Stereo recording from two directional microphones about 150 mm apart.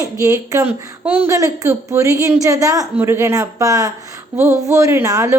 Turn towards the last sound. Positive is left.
turn(degrees=-20)  # may be behind; listen again after turning